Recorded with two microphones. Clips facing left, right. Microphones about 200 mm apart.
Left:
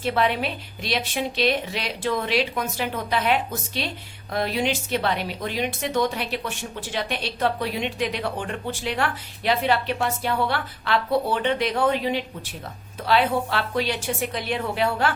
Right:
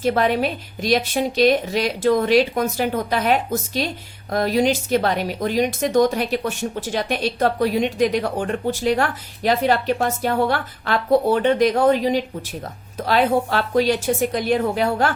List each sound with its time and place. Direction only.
0.0 s a woman's voice: 45° right (ahead or behind)